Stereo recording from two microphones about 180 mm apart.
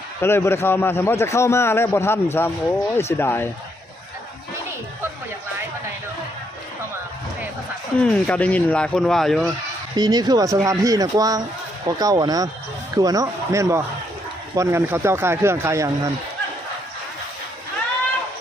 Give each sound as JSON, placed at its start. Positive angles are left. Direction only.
{"t": 0.2, "sound": "a man's voice", "side_deg": 15}
{"t": 8.0, "sound": "speech", "side_deg": 5}
{"t": 10.0, "sound": "speech", "side_deg": -20}